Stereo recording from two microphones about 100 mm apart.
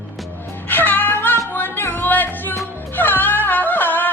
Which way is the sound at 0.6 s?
20° left (ahead or behind).